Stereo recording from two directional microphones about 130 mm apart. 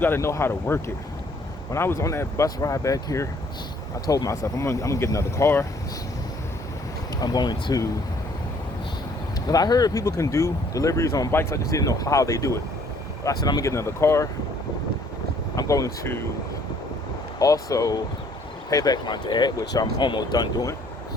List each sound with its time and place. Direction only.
0.0 s speech: 20° left (ahead or behind)
7.2 s speech: 30° left (ahead or behind)
9.5 s speech: 30° left (ahead or behind)
15.5 s speech: 25° left (ahead or behind)
17.4 s speech: 25° left (ahead or behind)